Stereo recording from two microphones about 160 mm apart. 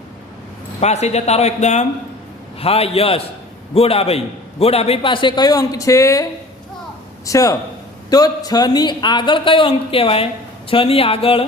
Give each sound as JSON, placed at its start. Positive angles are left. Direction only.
{"t": 0.8, "sound": "a man's voice", "side_deg": 45}
{"t": 7.3, "sound": "a man's voice", "side_deg": 20}